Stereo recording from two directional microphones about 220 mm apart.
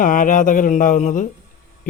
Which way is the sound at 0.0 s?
35° left (ahead or behind).